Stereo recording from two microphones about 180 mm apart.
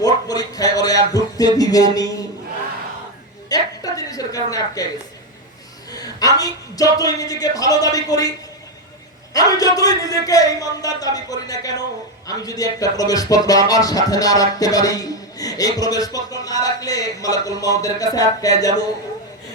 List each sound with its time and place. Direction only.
0.0 s a sound: 20° left (ahead or behind)
1.5 s a man's voice: 20° left (ahead or behind)
3.5 s a sound: 20° left (ahead or behind)
4.5 s a man's voice: 20° left (ahead or behind)
5.9 s a man's voice: 20° left (ahead or behind)
9.3 s a man's voice: 20° left (ahead or behind)